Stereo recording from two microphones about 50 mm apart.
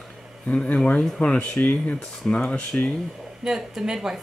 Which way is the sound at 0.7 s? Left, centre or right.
Left.